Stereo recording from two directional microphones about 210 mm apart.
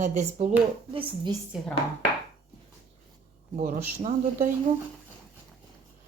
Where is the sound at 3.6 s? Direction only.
35° right (ahead or behind).